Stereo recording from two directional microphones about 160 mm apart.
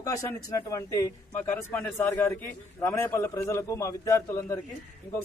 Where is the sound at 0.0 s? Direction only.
20° left (ahead or behind).